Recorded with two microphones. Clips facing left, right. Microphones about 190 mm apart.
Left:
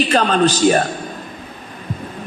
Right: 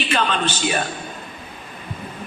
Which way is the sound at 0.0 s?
40° left (ahead or behind).